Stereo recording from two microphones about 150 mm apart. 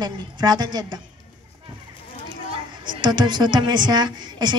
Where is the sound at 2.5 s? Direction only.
30° right (ahead or behind).